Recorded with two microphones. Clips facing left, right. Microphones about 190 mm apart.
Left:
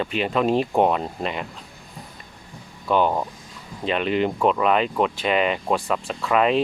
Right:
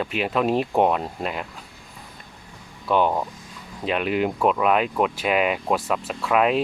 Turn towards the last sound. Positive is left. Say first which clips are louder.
# even
turn(degrees=-5)  # may be behind; listen again after turning